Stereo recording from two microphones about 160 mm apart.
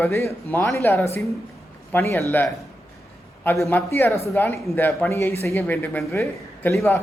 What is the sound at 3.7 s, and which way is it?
Speech, 15° left (ahead or behind).